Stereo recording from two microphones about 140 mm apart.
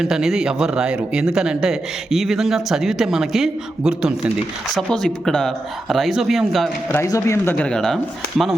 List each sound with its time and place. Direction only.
0.0 s speech: 5° right (ahead or behind)
6.9 s speech: 20° left (ahead or behind)
7.5 s speech: 5° left (ahead or behind)